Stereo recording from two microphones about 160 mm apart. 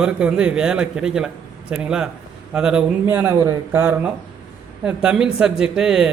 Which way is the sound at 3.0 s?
15° right (ahead or behind).